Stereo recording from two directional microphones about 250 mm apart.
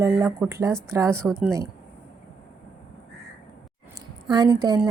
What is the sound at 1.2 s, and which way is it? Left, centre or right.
Speech, centre.